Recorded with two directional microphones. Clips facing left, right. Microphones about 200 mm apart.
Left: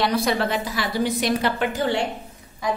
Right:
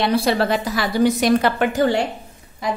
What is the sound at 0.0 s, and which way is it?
A woman's voice, 30° right (ahead or behind).